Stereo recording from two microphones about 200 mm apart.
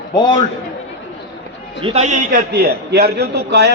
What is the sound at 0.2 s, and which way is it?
Speech, 20° left (ahead or behind).